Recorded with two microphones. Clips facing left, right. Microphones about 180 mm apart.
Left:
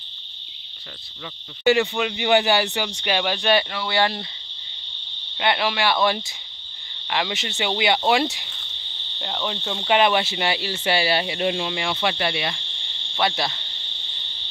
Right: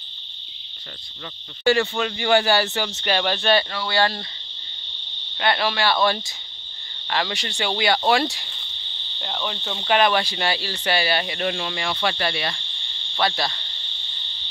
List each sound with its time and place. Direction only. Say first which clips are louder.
1.6 s speech: left 1 dB; 15° left (ahead or behind)
5.4 s speech: even; 15° left (ahead or behind)